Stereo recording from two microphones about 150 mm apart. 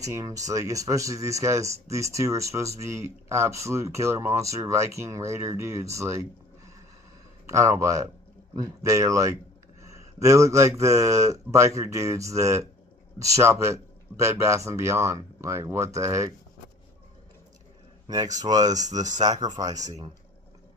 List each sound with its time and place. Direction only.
0.0 s speech: 20° right (ahead or behind)
7.4 s speech: 20° right (ahead or behind)
18.1 s speech: 25° right (ahead or behind)